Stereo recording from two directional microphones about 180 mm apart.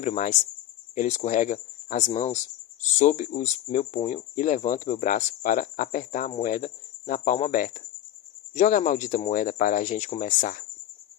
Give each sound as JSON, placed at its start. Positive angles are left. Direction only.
{"t": 0.0, "sound": "speech", "side_deg": 40}